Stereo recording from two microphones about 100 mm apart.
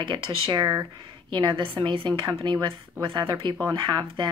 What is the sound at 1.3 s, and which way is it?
Speech, 60° right (ahead or behind).